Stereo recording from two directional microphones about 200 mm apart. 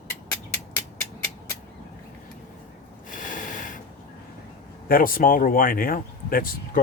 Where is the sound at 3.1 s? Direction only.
40° left (ahead or behind).